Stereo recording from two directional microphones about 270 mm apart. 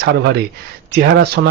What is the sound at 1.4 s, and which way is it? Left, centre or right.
Speech, right.